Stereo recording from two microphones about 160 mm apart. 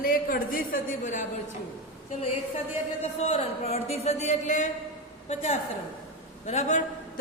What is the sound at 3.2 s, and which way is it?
Speech, 40° left (ahead or behind).